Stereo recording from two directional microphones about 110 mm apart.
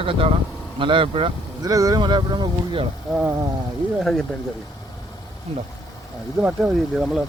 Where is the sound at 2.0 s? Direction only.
45° right (ahead or behind).